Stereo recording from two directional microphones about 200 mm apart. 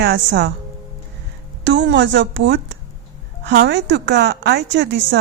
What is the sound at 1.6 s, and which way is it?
A woman's voice, 60° right (ahead or behind).